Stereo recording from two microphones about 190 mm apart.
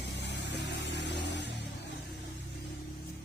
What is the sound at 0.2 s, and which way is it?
Vehicle, 65° left (ahead or behind).